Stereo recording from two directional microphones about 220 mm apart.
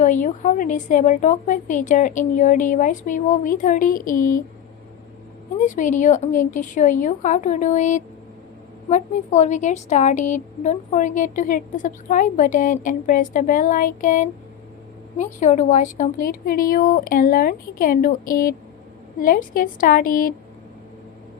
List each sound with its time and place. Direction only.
0.0 s a woman's voice: 35° left (ahead or behind)
5.5 s a woman's voice: 35° left (ahead or behind)